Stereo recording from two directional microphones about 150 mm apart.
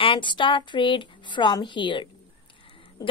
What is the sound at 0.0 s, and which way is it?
A woman's voice, 35° left (ahead or behind).